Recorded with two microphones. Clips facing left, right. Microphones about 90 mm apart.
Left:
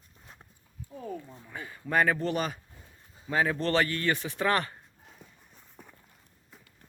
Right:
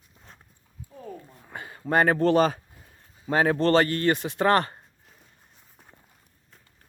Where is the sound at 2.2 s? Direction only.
90° right.